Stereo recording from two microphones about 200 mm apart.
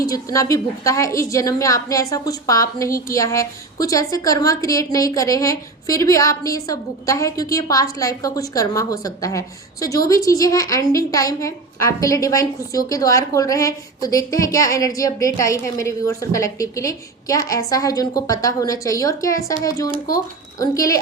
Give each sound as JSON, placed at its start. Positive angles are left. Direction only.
{"t": 0.0, "sound": "a woman's voice", "side_deg": 15}